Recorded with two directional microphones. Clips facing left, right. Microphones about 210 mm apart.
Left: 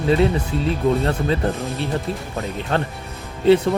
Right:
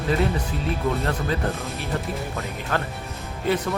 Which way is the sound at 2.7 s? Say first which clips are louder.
Left 3 dB; 25° left (ahead or behind).